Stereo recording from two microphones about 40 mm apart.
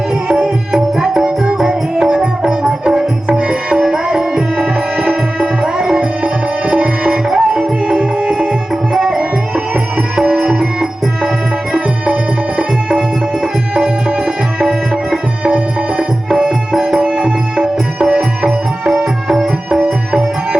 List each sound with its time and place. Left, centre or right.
0.3 s tabla: centre
11.7 s music: centre
13.7 s music: right
14.2 s tabla: centre
18.0 s music: centre